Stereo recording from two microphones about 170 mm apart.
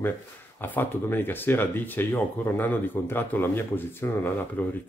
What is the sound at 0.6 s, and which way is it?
Speech, 10° left (ahead or behind).